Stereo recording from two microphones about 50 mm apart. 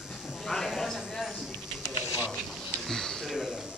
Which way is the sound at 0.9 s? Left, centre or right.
Centre.